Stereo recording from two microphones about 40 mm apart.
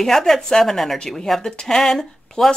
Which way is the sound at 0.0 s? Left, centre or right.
Centre.